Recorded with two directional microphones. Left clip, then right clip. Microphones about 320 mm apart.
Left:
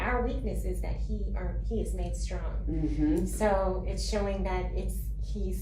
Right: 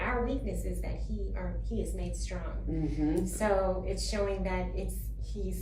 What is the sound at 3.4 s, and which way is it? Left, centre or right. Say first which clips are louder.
A woman's voice: left 1 dB; centre.